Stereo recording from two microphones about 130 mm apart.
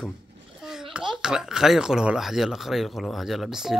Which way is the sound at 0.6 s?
5° right (ahead or behind).